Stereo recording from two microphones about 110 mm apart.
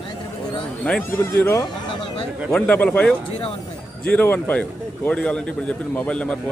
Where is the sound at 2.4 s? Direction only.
10° left (ahead or behind).